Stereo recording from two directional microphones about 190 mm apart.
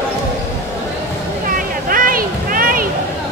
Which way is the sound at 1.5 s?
45° right (ahead or behind).